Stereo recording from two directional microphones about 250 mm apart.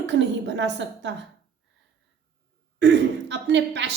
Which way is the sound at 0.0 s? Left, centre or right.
Right.